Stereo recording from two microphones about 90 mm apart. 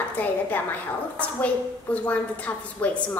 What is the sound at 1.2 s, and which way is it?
A woman's voice, 15° left (ahead or behind).